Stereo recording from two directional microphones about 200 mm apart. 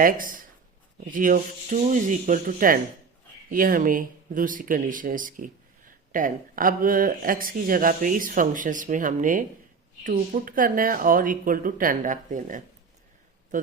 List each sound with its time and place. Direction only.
0.0 s speech: 45° right (ahead or behind)